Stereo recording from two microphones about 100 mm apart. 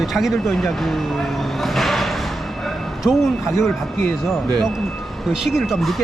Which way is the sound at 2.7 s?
5° right (ahead or behind).